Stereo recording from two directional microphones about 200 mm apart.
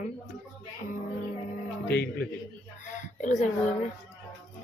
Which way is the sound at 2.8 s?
40° left (ahead or behind).